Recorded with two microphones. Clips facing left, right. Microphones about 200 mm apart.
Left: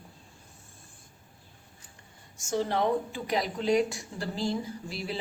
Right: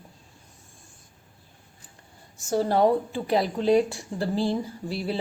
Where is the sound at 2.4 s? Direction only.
35° right (ahead or behind).